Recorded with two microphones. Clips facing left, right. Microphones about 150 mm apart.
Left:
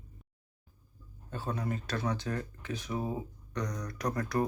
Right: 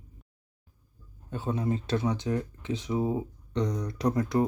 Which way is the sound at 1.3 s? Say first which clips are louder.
Right 6 dB; 20° right (ahead or behind).